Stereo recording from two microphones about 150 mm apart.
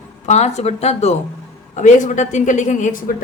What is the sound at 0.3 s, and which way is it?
A woman's voice, 45° left (ahead or behind).